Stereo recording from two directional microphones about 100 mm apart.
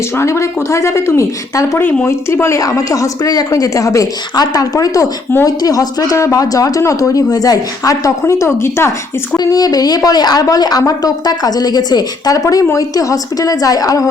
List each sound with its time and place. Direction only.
0.2 s speech: 30° left (ahead or behind)
9.4 s speech: 40° left (ahead or behind)